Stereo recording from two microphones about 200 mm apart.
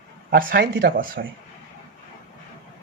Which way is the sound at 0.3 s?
50° right (ahead or behind).